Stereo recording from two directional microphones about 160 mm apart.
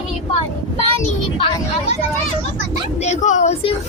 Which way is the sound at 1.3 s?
35° left (ahead or behind).